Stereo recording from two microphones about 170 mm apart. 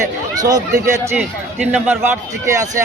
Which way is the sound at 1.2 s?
5° right (ahead or behind).